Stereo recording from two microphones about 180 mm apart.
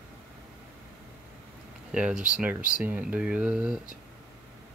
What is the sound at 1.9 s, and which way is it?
Speech, 5° right (ahead or behind).